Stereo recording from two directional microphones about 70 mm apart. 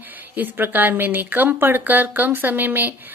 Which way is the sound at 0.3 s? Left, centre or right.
Right.